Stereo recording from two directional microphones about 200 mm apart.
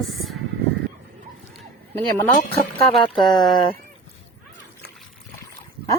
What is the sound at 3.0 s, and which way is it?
Speech, 25° left (ahead or behind).